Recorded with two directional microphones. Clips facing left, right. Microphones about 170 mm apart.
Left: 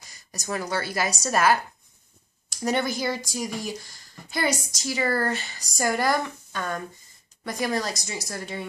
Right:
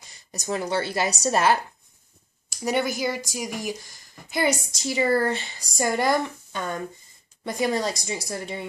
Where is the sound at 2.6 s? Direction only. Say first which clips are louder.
Right 1 dB; 10° right (ahead or behind).